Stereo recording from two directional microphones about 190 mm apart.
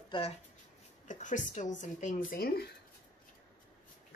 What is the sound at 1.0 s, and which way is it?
Speech, 40° left (ahead or behind).